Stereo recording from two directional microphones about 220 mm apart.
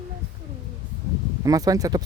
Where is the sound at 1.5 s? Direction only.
15° right (ahead or behind).